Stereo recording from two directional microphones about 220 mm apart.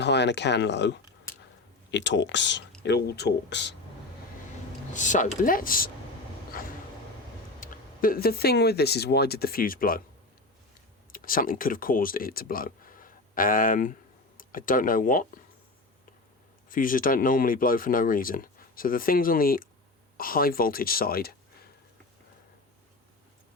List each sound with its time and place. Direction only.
0.0 s speech: 50° left (ahead or behind)
4.9 s speech: 35° left (ahead or behind)
7.6 s speech: 40° left (ahead or behind)
11.1 s speech: 40° left (ahead or behind)
16.6 s speech: 40° left (ahead or behind)